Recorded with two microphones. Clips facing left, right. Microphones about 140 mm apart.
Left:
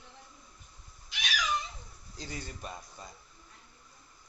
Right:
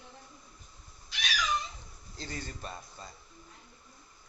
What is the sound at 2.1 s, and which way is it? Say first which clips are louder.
Speech: right 1 dB; 10° left (ahead or behind).